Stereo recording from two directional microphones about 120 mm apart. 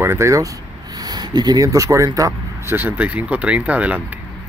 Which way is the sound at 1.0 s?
35° right (ahead or behind).